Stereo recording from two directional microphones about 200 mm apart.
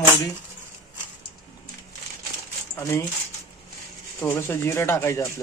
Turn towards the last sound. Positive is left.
turn(degrees=10)  # may be behind; listen again after turning